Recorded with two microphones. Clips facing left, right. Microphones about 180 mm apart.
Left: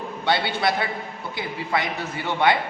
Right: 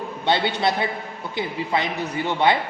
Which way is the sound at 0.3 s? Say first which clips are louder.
Right 1 dB; 20° right (ahead or behind).